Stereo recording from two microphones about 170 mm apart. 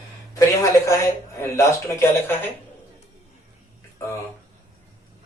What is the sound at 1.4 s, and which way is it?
Speech, 15° left (ahead or behind).